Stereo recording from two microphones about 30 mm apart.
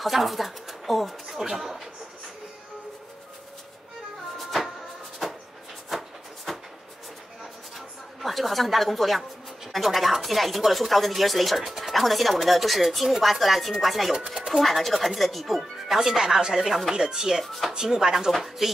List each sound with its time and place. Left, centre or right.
0.0 s speech: centre
1.3 s speech: centre
4.4 s a sound: centre
5.9 s a sound: centre
7.7 s speech: centre
14.1 s speech: centre
14.5 s speech: centre
16.2 s speech: centre